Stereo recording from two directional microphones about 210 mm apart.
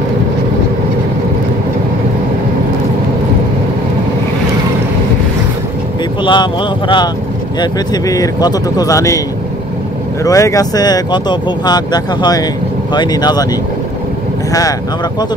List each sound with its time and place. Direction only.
6.2 s speech: 20° left (ahead or behind)
10.2 s speech: 15° left (ahead or behind)